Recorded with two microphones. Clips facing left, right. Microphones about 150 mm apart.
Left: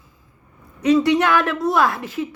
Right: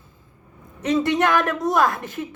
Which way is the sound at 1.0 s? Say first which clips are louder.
Left 2 dB; 45° right (ahead or behind).